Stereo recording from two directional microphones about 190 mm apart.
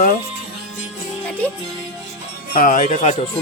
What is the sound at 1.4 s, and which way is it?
Speech, 10° left (ahead or behind).